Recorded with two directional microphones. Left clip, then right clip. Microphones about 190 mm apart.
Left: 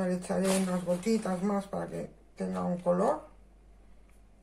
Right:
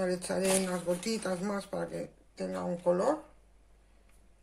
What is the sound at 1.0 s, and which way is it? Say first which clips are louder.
Speech: left 3 dB; 55° right (ahead or behind).